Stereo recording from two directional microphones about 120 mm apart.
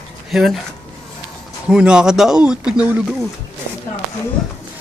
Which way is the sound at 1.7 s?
5° right (ahead or behind).